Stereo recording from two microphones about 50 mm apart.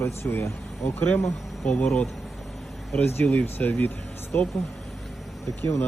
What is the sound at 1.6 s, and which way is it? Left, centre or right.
Speech, left.